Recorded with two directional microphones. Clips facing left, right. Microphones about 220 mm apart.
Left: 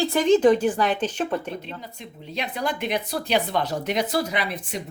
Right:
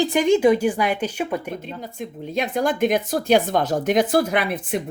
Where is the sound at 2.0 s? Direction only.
50° right (ahead or behind).